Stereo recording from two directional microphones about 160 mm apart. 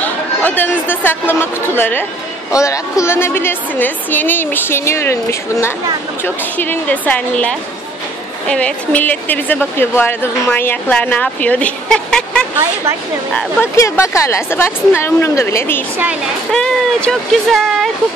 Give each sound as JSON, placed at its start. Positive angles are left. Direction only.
{"t": 0.0, "sound": "a woman's voice", "side_deg": 10}
{"t": 13.4, "sound": "a woman's voice", "side_deg": 15}